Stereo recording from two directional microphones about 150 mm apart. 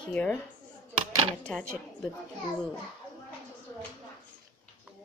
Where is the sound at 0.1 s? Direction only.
10° left (ahead or behind).